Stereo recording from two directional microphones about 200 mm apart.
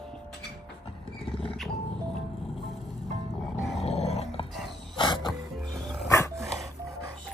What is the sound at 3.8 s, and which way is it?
Dog, 30° left (ahead or behind).